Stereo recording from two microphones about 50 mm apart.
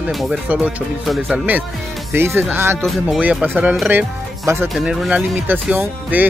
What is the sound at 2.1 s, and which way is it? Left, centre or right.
Speech, right.